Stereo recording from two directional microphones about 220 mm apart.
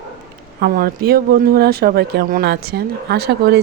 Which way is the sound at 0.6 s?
45° right (ahead or behind).